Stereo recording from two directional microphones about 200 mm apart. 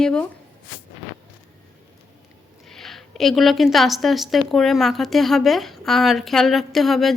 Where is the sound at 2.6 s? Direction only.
Centre (ahead or behind).